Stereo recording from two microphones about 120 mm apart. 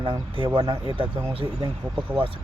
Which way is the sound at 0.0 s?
40° right (ahead or behind).